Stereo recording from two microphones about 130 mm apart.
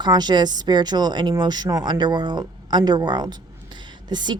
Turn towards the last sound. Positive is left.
turn(degrees=-35)  # may be behind; listen again after turning